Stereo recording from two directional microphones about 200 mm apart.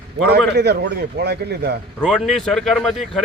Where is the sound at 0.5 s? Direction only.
55° right (ahead or behind).